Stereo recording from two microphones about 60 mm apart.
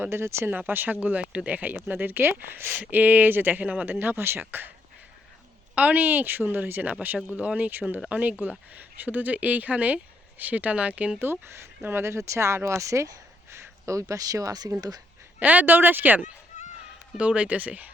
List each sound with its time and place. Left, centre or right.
0.0 s speech: right
0.5 s speech: right
5.7 s speech: right
11.2 s speech: right
12.1 s speech: right
13.5 s a sound: right
13.9 s speech: right
15.4 s speech: right